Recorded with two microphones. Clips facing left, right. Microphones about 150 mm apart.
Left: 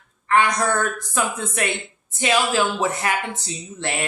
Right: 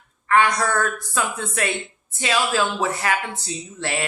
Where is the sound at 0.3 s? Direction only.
20° left (ahead or behind).